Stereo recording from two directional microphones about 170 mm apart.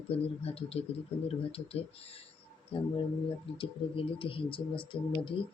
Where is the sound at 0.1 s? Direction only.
35° left (ahead or behind).